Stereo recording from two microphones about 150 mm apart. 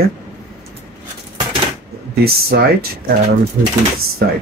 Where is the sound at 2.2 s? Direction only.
90° right.